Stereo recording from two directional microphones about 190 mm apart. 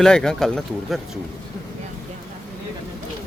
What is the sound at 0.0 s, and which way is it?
Speech, 5° left (ahead or behind).